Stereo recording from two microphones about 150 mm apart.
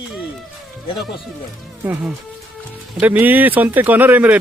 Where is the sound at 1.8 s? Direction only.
10° right (ahead or behind).